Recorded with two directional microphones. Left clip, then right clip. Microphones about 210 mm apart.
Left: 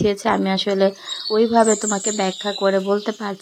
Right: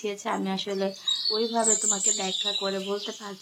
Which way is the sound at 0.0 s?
35° left (ahead or behind).